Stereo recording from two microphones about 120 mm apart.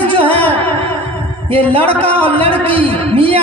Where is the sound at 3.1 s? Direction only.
50° right (ahead or behind).